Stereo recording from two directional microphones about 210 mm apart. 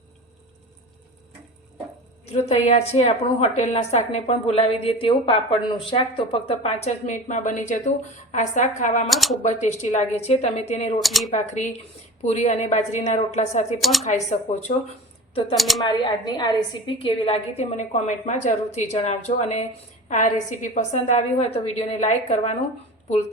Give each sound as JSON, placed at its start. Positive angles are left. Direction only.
{"t": 2.3, "sound": "a woman's voice", "side_deg": 30}
{"t": 9.0, "sound": "speech", "side_deg": 0}
{"t": 9.4, "sound": "a woman's voice", "side_deg": 35}
{"t": 11.0, "sound": "speech", "side_deg": 0}
{"t": 11.3, "sound": "a woman's voice", "side_deg": 35}
{"t": 15.5, "sound": "speech", "side_deg": 0}
{"t": 15.8, "sound": "a woman's voice", "side_deg": 20}